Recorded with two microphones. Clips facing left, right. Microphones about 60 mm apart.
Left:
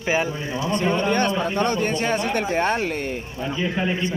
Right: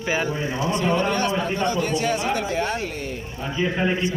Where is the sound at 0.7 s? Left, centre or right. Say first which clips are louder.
Left 2 dB; left.